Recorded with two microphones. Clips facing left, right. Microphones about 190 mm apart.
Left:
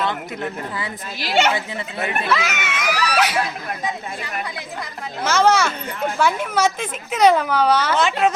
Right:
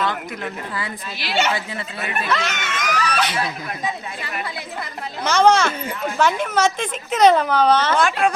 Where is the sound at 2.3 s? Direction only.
5° left (ahead or behind).